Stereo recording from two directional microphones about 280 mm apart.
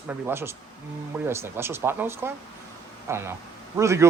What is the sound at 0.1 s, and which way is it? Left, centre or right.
A man's voice, centre.